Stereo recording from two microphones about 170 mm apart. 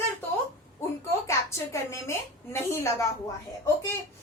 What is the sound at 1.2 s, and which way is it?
A woman's voice, 15° left (ahead or behind).